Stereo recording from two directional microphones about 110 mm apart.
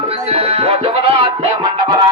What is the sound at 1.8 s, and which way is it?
Music, 40° right (ahead or behind).